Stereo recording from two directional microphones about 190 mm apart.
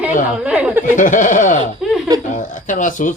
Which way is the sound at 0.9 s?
40° left (ahead or behind).